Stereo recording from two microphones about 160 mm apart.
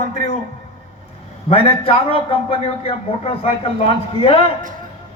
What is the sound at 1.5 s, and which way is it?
A man's voice, 35° left (ahead or behind).